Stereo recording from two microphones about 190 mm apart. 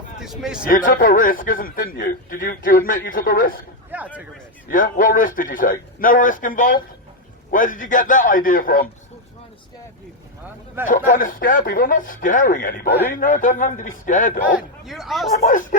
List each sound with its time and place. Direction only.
0.2 s speech: 5° right (ahead or behind)
0.7 s a man's voice: 50° left (ahead or behind)
3.9 s a man's voice: 10° right (ahead or behind)
4.7 s a man's voice: 45° left (ahead or behind)
10.8 s a man's voice: 45° left (ahead or behind)
14.4 s speech: 5° right (ahead or behind)